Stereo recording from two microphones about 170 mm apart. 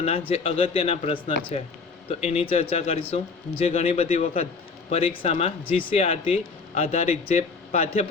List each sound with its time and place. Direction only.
0.0 s speech: 35° left (ahead or behind)